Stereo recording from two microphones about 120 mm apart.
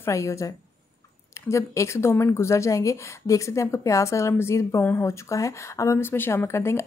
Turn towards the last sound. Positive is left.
turn(degrees=25)  # may be behind; listen again after turning